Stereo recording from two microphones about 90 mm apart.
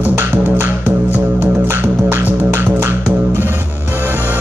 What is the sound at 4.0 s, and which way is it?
Music, 25° right (ahead or behind).